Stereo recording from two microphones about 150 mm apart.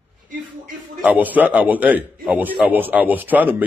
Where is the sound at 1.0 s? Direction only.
10° right (ahead or behind).